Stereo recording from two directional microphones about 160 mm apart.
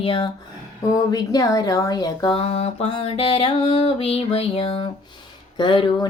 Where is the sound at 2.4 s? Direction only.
40° left (ahead or behind).